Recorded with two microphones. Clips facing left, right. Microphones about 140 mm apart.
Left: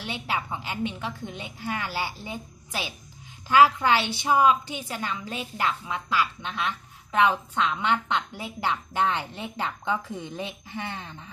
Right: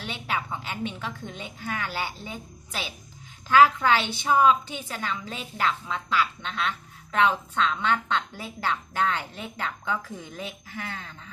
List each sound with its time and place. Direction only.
0.0 s a woman's voice: 15° left (ahead or behind)